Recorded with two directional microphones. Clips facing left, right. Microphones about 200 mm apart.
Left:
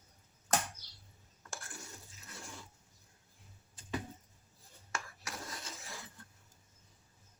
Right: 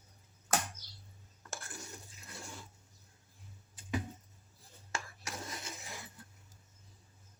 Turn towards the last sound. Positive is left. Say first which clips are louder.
# right 2 dB
turn(degrees=-15)  # may be behind; listen again after turning